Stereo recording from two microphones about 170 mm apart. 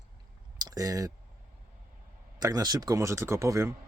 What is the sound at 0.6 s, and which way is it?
Speech, 20° right (ahead or behind).